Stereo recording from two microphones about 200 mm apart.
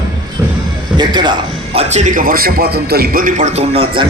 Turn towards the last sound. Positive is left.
turn(degrees=-30)  # may be behind; listen again after turning